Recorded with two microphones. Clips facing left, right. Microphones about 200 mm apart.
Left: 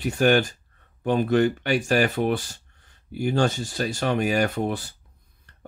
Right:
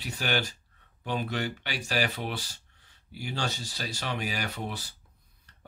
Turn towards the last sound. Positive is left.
turn(degrees=50)  # may be behind; listen again after turning